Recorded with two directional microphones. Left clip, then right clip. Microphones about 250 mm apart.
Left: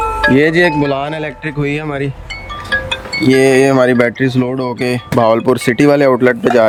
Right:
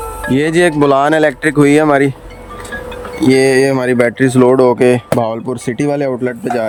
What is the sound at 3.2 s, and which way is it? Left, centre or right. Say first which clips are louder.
Speech: even; centre.